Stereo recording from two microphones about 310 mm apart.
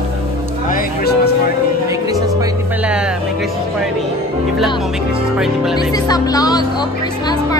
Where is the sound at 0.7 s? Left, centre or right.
Left.